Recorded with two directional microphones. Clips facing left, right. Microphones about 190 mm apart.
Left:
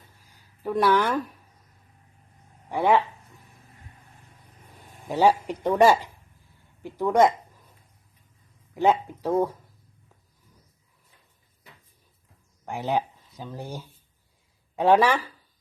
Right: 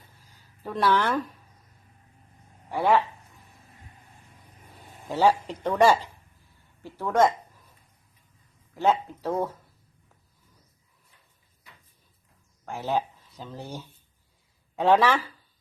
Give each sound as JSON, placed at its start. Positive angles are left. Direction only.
{"t": 0.2, "sound": "a sound", "side_deg": 15}
{"t": 5.0, "sound": "speech", "side_deg": 15}
{"t": 8.7, "sound": "speech", "side_deg": 15}
{"t": 12.6, "sound": "speech", "side_deg": 15}